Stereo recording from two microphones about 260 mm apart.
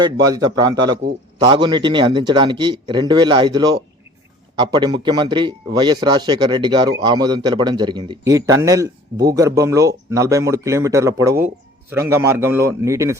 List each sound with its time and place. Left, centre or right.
0.0 s a man's voice: centre